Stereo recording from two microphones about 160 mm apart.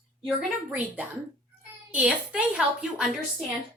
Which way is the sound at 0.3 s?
5° right (ahead or behind).